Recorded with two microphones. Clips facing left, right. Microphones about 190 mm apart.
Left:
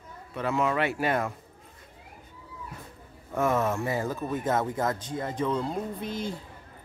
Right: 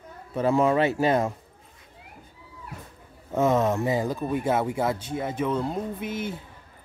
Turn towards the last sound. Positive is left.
turn(degrees=-5)  # may be behind; listen again after turning